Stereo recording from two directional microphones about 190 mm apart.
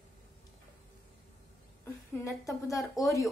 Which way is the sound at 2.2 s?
15° left (ahead or behind).